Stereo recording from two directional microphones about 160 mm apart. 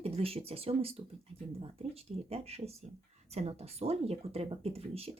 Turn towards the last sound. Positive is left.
turn(degrees=-40)  # may be behind; listen again after turning